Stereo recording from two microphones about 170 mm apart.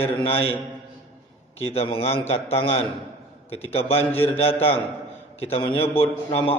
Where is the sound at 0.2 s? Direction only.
35° left (ahead or behind).